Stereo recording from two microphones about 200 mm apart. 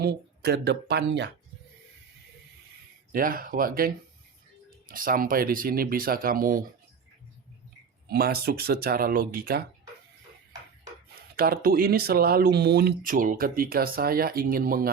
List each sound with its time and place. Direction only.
0.0 s speech: 55° right (ahead or behind)
3.1 s speech: 45° right (ahead or behind)
8.0 s speech: 50° right (ahead or behind)
11.1 s speech: 50° right (ahead or behind)